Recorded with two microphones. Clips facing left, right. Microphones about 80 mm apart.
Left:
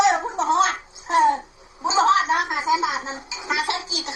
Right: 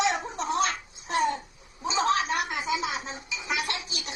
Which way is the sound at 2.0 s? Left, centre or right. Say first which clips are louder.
Left 7 dB; left.